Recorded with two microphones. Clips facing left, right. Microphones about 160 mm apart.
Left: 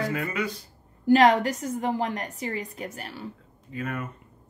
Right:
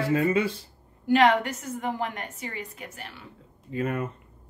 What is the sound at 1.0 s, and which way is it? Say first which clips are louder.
Speech: left 2 dB; 40° left (ahead or behind).